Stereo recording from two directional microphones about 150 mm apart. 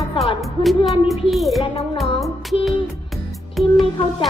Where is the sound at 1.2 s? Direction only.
Centre (ahead or behind).